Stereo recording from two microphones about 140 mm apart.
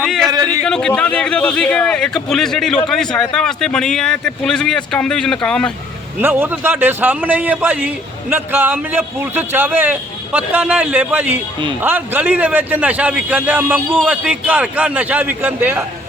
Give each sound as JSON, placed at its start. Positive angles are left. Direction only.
{"t": 0.3, "sound": "speech", "side_deg": -30}
{"t": 0.6, "sound": "speech", "side_deg": 5}
{"t": 6.2, "sound": "a man's voice", "side_deg": -15}